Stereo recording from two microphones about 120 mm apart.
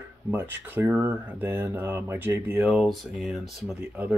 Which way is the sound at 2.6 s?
5° right (ahead or behind).